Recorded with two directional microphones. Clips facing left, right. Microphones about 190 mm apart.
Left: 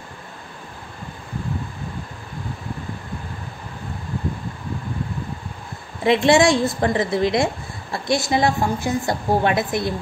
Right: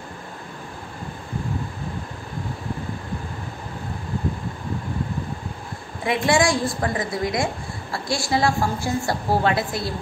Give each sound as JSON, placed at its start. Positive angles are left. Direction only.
{"t": 6.0, "sound": "a woman's voice", "side_deg": 25}